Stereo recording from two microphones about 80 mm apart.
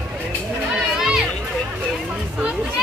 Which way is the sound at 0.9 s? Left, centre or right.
Centre.